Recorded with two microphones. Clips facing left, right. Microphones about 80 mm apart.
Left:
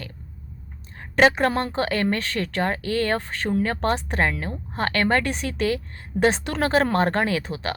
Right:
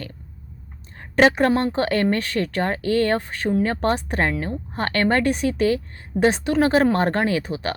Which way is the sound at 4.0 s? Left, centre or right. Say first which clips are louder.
Right 1 dB; left.